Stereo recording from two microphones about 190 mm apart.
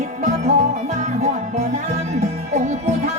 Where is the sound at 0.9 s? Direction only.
40° right (ahead or behind).